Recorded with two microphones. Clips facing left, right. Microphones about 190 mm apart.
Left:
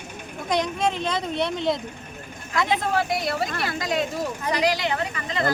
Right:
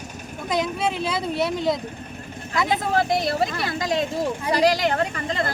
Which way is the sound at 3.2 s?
30° right (ahead or behind).